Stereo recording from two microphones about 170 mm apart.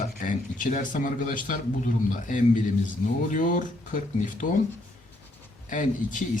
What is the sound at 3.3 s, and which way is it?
Speech, 50° left (ahead or behind).